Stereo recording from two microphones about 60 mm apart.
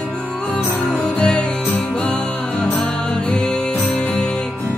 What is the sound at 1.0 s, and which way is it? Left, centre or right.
Music, centre.